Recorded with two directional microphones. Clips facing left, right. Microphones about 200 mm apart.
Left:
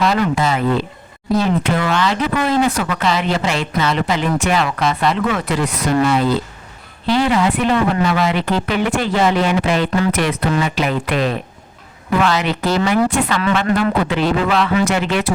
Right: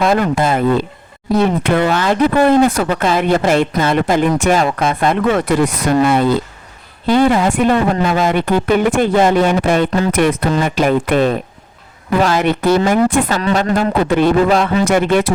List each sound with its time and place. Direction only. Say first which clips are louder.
0.0 s speech: right 3 dB; 50° right (ahead or behind)